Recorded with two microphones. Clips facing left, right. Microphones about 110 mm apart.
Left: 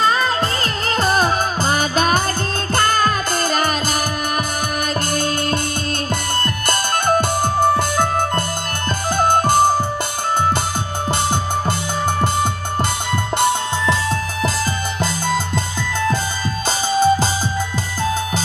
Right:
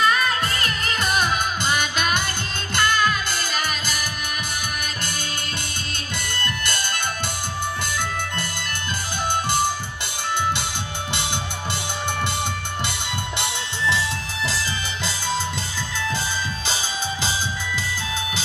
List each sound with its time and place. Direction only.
0.0 s music: 30° left (ahead or behind)
6.7 s music: 45° left (ahead or behind)
13.4 s music: 45° left (ahead or behind)
16.9 s music: 45° left (ahead or behind)